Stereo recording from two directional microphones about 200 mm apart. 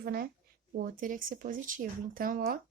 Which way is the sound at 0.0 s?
50° right (ahead or behind).